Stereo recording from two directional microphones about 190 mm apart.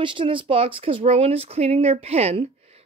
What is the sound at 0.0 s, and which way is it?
A woman's voice, 25° right (ahead or behind).